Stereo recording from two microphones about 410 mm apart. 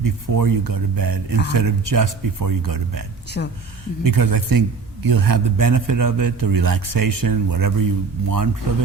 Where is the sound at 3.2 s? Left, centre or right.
Left.